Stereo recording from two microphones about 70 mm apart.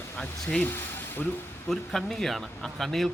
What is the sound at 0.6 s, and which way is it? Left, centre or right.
Speech, left.